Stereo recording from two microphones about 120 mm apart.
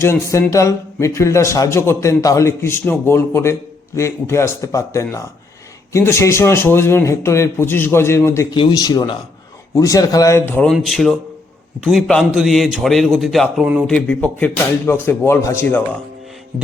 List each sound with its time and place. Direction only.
0.0 s a man's voice: 25° left (ahead or behind)
8.5 s a man's voice: 40° left (ahead or behind); by 10.7 s 15° left (ahead or behind)
10.7 s a man's voice: 5° left (ahead or behind); by 15.6 s 25° left (ahead or behind)